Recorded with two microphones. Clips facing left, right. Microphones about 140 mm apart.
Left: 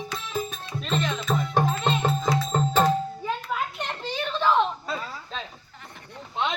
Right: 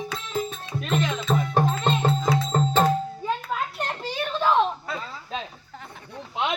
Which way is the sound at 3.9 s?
5° right (ahead or behind).